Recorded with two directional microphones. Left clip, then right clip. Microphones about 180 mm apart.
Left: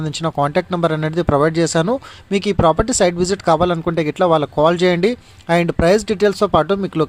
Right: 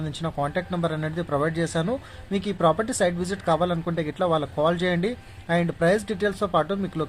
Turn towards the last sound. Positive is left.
turn(degrees=40)  # may be behind; listen again after turning